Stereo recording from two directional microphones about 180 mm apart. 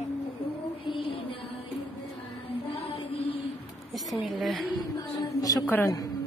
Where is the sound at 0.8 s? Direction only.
30° left (ahead or behind).